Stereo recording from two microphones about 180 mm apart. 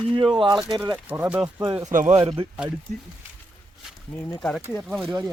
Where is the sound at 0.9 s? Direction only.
10° right (ahead or behind).